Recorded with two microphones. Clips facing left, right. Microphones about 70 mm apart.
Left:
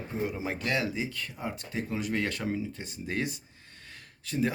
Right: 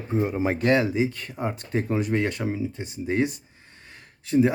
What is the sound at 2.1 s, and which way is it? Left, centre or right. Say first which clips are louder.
Speech: right 5 dB; centre.